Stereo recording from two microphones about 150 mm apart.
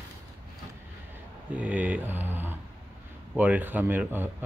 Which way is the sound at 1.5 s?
10° right (ahead or behind).